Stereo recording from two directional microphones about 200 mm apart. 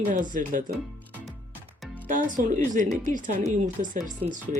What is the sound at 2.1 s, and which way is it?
Speech, 40° right (ahead or behind).